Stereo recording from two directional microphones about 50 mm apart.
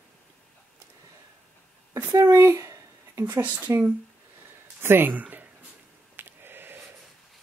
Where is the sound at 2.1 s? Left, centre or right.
Right.